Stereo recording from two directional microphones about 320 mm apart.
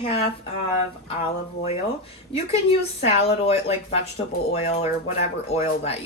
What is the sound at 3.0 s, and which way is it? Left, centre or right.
Speech, centre.